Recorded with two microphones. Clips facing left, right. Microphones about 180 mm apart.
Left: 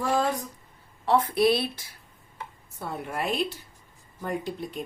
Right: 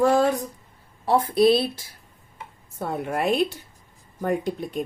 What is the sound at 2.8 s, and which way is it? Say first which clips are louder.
Speech: right 6 dB; 45° right (ahead or behind).